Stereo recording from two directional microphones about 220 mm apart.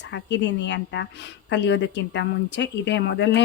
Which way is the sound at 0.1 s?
55° left (ahead or behind).